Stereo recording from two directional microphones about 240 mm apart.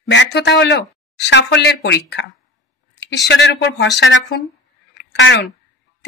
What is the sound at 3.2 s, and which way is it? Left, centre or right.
Speech, left.